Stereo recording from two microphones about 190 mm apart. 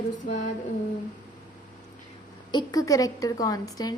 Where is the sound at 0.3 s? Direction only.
40° left (ahead or behind).